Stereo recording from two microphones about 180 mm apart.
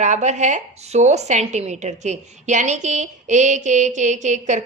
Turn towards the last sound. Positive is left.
turn(degrees=-40)  # may be behind; listen again after turning